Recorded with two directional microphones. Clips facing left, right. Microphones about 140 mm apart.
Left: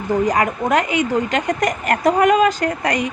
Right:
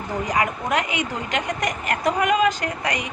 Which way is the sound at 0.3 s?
40° left (ahead or behind).